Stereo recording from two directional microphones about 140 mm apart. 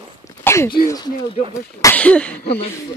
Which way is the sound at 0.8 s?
25° left (ahead or behind).